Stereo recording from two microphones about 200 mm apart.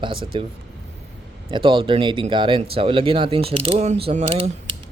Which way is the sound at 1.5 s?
25° right (ahead or behind).